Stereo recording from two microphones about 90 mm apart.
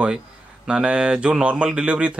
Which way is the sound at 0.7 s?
10° right (ahead or behind).